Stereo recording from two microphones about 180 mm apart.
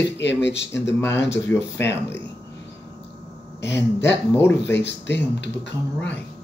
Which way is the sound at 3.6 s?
75° left (ahead or behind).